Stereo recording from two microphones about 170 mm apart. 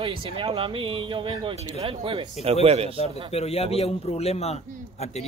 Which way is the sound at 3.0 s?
35° left (ahead or behind).